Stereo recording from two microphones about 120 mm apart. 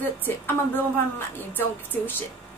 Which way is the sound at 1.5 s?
15° left (ahead or behind).